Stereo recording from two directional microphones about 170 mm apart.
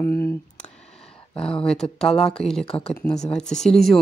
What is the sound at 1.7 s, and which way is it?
Speech, 5° left (ahead or behind).